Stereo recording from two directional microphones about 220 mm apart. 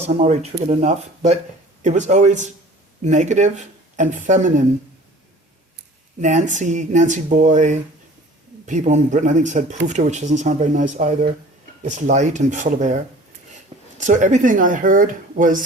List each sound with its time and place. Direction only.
0.1 s speech: 30° right (ahead or behind)
6.1 s speech: 35° right (ahead or behind)
14.0 s speech: 35° right (ahead or behind)